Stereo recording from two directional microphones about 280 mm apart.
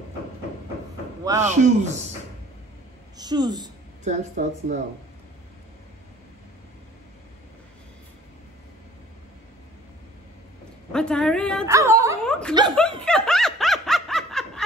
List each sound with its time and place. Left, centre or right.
1.2 s speech: centre
1.5 s a woman's voice: right
3.2 s speech: centre
4.0 s a woman's voice: right
10.9 s a woman's voice: centre
11.6 s speech: centre
12.3 s speech: centre
12.7 s snicker: centre